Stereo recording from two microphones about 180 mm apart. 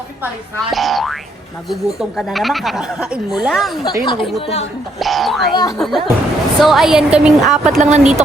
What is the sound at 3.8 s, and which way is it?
Speech, 25° left (ahead or behind).